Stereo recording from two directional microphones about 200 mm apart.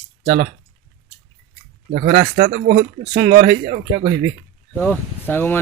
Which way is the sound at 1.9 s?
50° right (ahead or behind).